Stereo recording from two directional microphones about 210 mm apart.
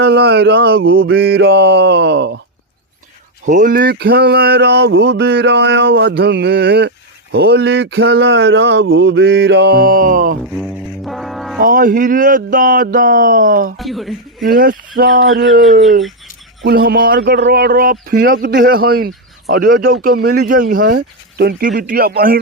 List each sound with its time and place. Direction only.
0.0 s speech: 50° right (ahead or behind)
3.4 s speech: 40° right (ahead or behind)
10.5 s music: centre (ahead or behind)
11.6 s speech: 40° right (ahead or behind)
13.7 s speech: centre (ahead or behind)
14.4 s speech: 45° right (ahead or behind)
15.6 s speech: centre (ahead or behind)
16.6 s speech: 45° right (ahead or behind)